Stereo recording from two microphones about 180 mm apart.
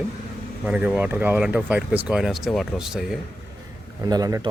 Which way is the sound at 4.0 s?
20° right (ahead or behind).